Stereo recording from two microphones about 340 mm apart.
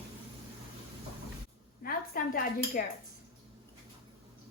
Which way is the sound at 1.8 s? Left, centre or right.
Left.